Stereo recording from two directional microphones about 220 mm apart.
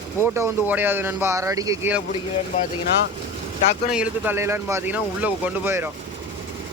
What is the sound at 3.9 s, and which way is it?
Speech, 5° right (ahead or behind).